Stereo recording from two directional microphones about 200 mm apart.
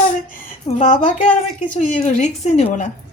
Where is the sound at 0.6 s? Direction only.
35° left (ahead or behind).